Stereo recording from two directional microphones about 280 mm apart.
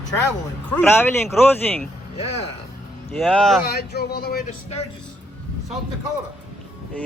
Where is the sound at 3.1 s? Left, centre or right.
Centre.